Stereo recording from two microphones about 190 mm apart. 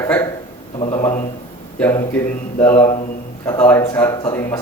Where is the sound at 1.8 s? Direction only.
15° left (ahead or behind).